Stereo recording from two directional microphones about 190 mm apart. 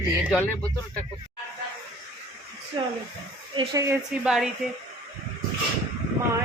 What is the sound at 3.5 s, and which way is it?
Speech, 15° right (ahead or behind).